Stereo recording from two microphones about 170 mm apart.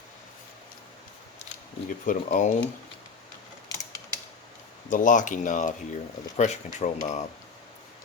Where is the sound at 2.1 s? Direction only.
50° left (ahead or behind).